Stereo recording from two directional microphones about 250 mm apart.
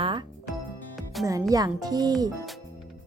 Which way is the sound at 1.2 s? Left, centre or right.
Centre.